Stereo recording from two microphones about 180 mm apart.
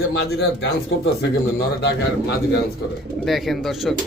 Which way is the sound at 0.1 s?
80° left.